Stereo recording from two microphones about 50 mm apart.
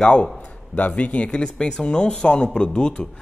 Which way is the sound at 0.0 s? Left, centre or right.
Centre.